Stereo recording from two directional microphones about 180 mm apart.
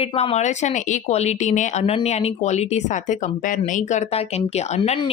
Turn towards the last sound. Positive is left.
turn(degrees=30)  # may be behind; listen again after turning